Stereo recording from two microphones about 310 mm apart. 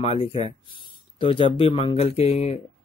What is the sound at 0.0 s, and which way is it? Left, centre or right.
Speech, centre.